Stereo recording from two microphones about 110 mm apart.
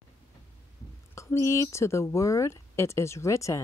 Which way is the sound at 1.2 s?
25° left (ahead or behind).